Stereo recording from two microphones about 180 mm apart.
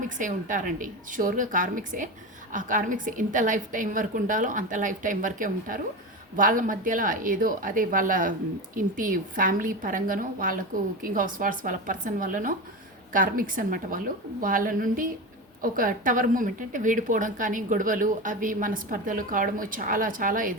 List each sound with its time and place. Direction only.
0.2 s a woman's voice: 45° right (ahead or behind)